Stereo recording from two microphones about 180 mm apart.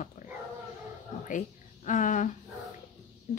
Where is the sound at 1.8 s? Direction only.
45° left (ahead or behind).